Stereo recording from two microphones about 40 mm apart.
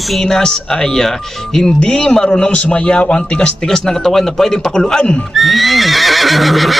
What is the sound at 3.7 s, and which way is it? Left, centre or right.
A man's voice, centre.